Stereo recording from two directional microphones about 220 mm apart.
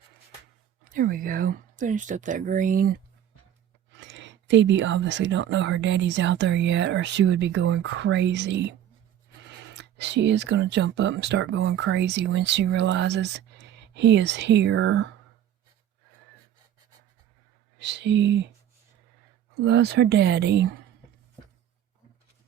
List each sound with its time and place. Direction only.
0.9 s speech: 40° right (ahead or behind)
3.9 s speech: 55° right (ahead or behind)
9.7 s speech: 50° right (ahead or behind)
17.7 s speech: 50° right (ahead or behind)
19.5 s speech: 50° right (ahead or behind)